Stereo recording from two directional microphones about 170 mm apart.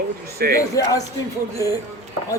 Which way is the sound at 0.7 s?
20° left (ahead or behind).